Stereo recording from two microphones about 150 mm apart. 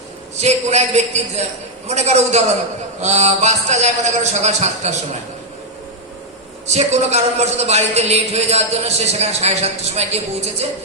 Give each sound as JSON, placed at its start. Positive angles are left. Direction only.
{"t": 0.4, "sound": "a man's voice", "side_deg": -50}
{"t": 6.7, "sound": "a man's voice", "side_deg": -45}